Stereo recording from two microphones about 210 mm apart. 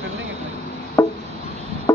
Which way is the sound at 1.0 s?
10° left (ahead or behind).